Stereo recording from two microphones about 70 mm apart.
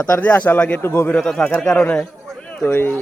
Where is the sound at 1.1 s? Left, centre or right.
Centre.